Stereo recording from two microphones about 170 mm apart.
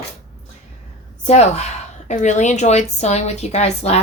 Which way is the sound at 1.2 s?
40° left (ahead or behind).